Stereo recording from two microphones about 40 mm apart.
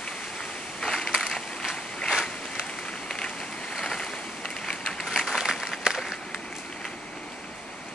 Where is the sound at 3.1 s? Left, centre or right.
Centre.